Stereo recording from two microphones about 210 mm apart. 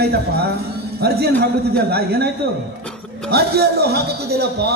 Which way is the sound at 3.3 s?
50° right (ahead or behind).